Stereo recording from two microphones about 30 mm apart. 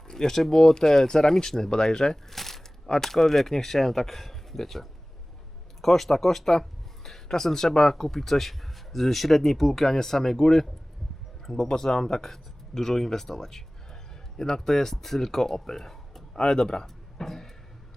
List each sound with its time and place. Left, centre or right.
0.1 s speech: centre
2.3 s speech: centre
11.7 s speech: centre